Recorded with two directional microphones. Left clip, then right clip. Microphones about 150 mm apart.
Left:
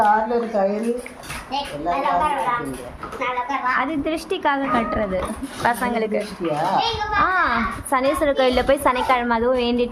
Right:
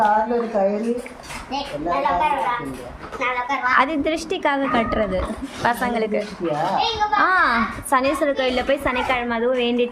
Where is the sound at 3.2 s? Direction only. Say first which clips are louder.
Right 1 dB; 50° right (ahead or behind).